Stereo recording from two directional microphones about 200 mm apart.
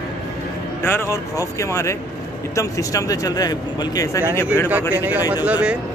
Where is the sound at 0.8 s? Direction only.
10° left (ahead or behind).